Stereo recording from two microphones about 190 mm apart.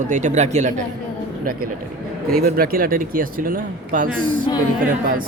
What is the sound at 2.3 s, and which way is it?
Speech, 50° right (ahead or behind).